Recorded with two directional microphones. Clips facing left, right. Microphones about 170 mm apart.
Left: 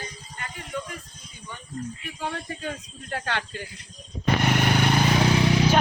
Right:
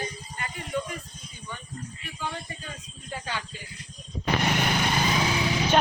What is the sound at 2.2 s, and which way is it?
Speech, 70° left (ahead or behind).